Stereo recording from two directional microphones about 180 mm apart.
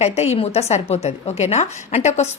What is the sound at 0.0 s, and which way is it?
A woman's voice, 35° left (ahead or behind).